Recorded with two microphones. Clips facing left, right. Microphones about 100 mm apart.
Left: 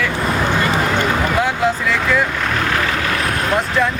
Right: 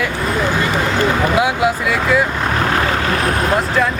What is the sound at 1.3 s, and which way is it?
Speech, 10° right (ahead or behind).